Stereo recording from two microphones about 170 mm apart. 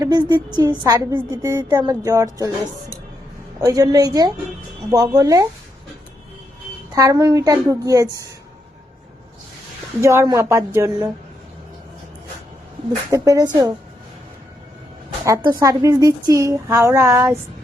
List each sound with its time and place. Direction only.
0.0 s a woman's voice: 25° right (ahead or behind)
3.7 s a woman's voice: 20° right (ahead or behind)
6.9 s a woman's voice: 20° right (ahead or behind)
10.0 s speech: 15° right (ahead or behind)
13.1 s a woman's voice: 20° right (ahead or behind)
15.2 s a woman's voice: 20° right (ahead or behind)